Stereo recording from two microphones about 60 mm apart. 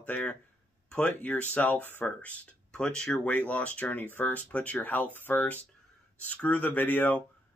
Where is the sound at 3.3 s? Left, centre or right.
Left.